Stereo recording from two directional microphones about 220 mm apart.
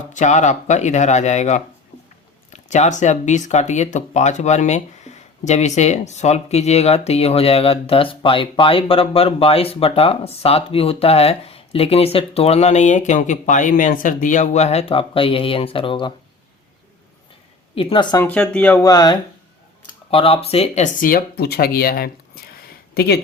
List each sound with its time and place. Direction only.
0.1 s speech: 35° left (ahead or behind)
17.7 s speech: 25° left (ahead or behind)
18.3 s speech: 5° left (ahead or behind); by 22.1 s 45° left (ahead or behind)
22.6 s a sound: 45° left (ahead or behind)